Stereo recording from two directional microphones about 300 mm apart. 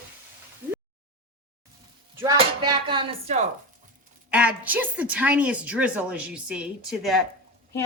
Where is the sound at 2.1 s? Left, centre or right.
Centre.